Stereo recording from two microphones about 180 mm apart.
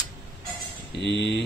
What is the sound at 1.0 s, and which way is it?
Speech, 75° left (ahead or behind).